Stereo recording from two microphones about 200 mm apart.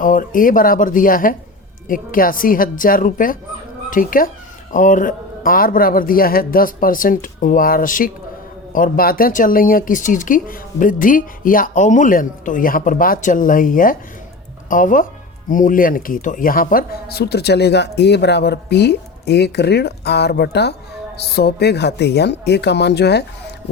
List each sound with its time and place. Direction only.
0.0 s speech: 45° left (ahead or behind)